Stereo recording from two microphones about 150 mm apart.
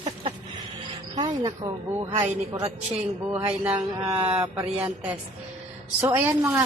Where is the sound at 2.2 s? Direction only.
20° right (ahead or behind).